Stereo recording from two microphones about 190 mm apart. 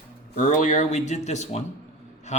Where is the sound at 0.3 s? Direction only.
40° left (ahead or behind).